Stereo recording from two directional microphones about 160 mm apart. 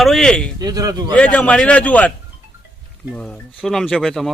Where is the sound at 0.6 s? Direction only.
25° right (ahead or behind).